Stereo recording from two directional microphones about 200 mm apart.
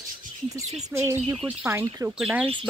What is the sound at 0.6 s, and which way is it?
Speech, 35° right (ahead or behind).